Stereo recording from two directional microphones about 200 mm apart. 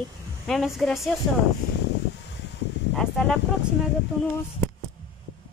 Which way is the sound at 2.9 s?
Centre (ahead or behind).